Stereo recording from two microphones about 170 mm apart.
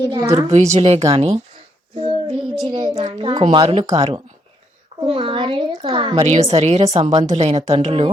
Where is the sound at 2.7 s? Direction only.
30° right (ahead or behind).